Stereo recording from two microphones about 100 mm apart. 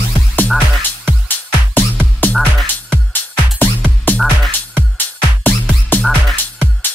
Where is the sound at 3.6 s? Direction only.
20° left (ahead or behind).